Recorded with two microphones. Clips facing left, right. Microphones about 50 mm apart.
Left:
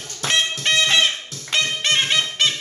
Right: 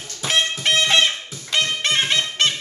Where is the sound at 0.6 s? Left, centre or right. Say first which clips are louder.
Right 1 dB; centre.